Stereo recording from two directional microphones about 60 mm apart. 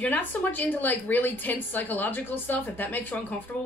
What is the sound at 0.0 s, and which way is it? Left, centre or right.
A woman's voice, left.